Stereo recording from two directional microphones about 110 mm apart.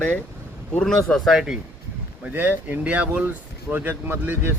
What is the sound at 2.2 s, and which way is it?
Speech, 15° right (ahead or behind).